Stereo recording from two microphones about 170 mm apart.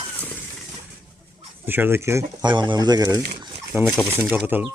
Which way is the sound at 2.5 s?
25° right (ahead or behind).